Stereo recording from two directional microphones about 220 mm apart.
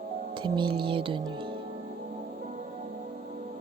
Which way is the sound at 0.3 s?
20° right (ahead or behind).